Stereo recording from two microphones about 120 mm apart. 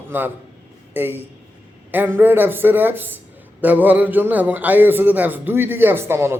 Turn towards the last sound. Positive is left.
turn(degrees=-20)  # may be behind; listen again after turning